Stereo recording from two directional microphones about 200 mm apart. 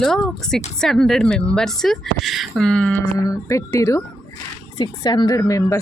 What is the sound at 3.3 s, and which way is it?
Speech, 15° left (ahead or behind).